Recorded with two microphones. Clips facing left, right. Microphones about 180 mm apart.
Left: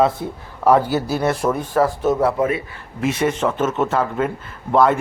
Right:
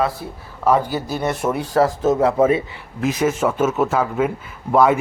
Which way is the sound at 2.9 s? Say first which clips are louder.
Even; centre (ahead or behind).